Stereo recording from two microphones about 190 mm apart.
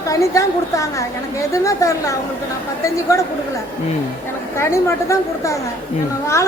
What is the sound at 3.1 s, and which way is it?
Speech, 15° left (ahead or behind).